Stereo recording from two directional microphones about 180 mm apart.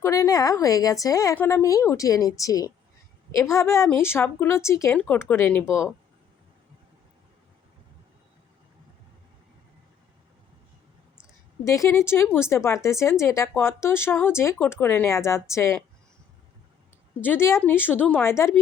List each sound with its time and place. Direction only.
0.0 s a woman's voice: 20° left (ahead or behind)
11.6 s speech: 15° left (ahead or behind)
17.2 s speech: 10° left (ahead or behind)